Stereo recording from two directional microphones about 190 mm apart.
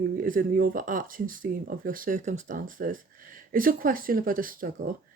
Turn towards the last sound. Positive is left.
turn(degrees=-45)  # may be behind; listen again after turning